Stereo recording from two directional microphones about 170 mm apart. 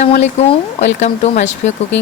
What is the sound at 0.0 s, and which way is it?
Speech, 40° left (ahead or behind).